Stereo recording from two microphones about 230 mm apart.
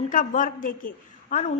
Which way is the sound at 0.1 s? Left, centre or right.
Left.